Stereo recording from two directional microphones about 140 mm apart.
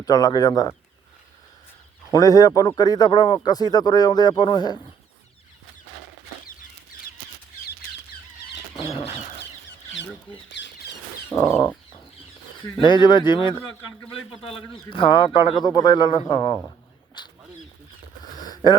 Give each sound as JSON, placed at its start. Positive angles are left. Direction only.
{"t": 0.0, "sound": "speech", "side_deg": 25}
{"t": 2.1, "sound": "speech", "side_deg": 25}
{"t": 8.7, "sound": "a sound", "side_deg": 40}
{"t": 11.3, "sound": "speech", "side_deg": 20}
{"t": 12.8, "sound": "a man's voice", "side_deg": 35}
{"t": 14.8, "sound": "a man's voice", "side_deg": 35}
{"t": 18.3, "sound": "a sound", "side_deg": 30}